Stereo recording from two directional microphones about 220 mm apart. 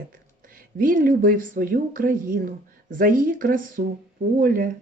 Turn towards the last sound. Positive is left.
turn(degrees=-40)  # may be behind; listen again after turning